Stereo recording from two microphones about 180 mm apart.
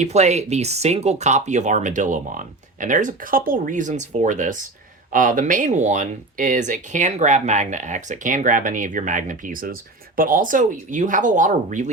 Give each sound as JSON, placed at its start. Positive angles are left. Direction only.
{"t": 0.0, "sound": "speech", "side_deg": -40}